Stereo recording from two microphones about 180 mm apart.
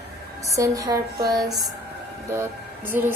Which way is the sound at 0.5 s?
20° right (ahead or behind).